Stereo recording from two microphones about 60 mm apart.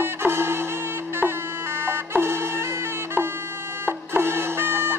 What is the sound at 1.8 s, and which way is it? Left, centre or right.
Music, right.